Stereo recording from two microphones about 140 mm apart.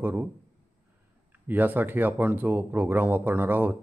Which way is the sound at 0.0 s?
15° right (ahead or behind).